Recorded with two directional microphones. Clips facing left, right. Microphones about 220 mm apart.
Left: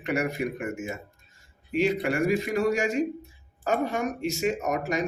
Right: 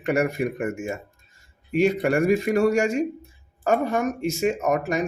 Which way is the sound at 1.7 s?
45° right (ahead or behind).